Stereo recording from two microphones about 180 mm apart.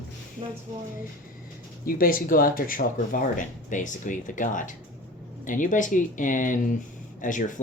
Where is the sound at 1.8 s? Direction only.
55° left (ahead or behind).